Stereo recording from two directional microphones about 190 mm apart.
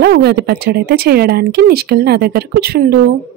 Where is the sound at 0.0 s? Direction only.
60° right (ahead or behind).